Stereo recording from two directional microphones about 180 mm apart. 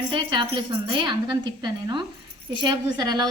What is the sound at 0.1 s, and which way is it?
A woman's voice, 25° right (ahead or behind).